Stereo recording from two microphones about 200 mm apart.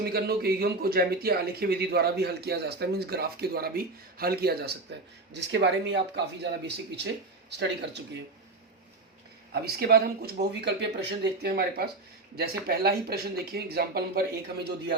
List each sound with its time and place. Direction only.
0.0 s speech: 50° right (ahead or behind)
9.5 s speech: 50° right (ahead or behind)